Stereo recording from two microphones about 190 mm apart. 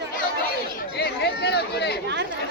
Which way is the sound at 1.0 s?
60° left (ahead or behind).